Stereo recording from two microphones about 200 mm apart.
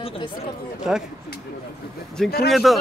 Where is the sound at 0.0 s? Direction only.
30° left (ahead or behind).